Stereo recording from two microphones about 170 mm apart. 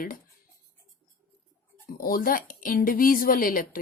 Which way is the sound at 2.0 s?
55° left (ahead or behind).